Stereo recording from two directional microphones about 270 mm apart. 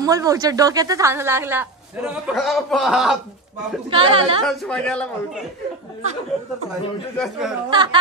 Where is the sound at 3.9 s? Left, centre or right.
Centre.